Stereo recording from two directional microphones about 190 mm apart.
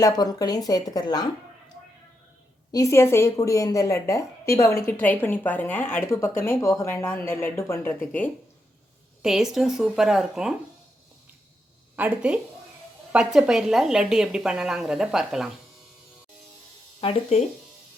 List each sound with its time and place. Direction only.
0.0 s speech: 20° left (ahead or behind)
2.7 s a woman's voice: 15° left (ahead or behind)
9.2 s speech: centre (ahead or behind)
11.9 s speech: 5° right (ahead or behind)
17.0 s speech: 30° left (ahead or behind)